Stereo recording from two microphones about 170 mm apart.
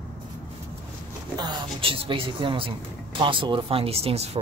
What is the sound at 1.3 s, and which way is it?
A woman's voice, 30° right (ahead or behind).